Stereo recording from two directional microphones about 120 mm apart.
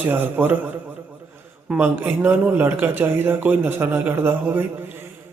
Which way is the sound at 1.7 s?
15° right (ahead or behind).